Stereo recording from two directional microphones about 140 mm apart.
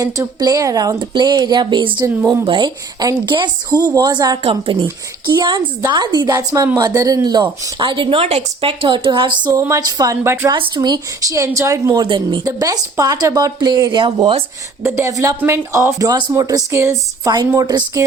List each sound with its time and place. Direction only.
0.0 s a woman's voice: 30° right (ahead or behind)
4.4 s a woman's voice: 40° right (ahead or behind)
9.6 s speech: 25° right (ahead or behind)
10.5 s speech: 30° right (ahead or behind)
14.8 s speech: 20° right (ahead or behind)